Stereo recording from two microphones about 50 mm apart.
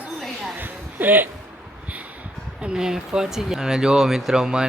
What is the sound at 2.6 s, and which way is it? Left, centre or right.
Speech, centre.